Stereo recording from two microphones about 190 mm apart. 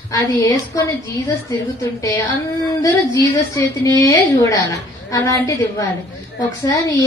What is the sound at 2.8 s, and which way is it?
A woman's voice, 20° left (ahead or behind).